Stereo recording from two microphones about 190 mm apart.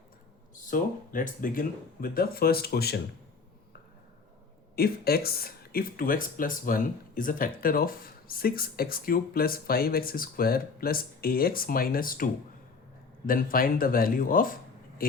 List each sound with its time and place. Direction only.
0.7 s speech: 45° left (ahead or behind)
4.7 s speech: 55° left (ahead or behind)